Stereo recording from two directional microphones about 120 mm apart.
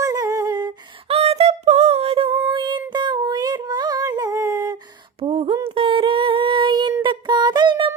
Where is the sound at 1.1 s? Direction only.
60° right (ahead or behind).